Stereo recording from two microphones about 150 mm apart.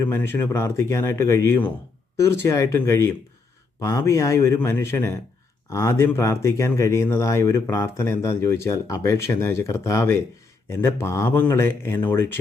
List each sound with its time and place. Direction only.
0.0 s a man's voice: 15° left (ahead or behind)